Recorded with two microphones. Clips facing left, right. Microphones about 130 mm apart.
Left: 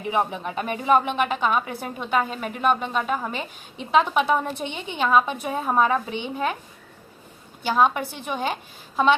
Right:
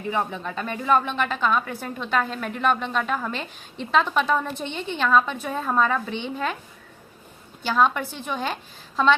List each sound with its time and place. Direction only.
0.0 s a woman's voice: 15° left (ahead or behind)
7.6 s a woman's voice: 15° left (ahead or behind)